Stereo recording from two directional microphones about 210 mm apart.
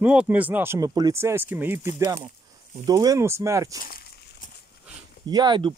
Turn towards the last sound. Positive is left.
turn(degrees=-20)  # may be behind; listen again after turning